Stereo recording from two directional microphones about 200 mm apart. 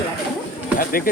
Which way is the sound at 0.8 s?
45° left (ahead or behind).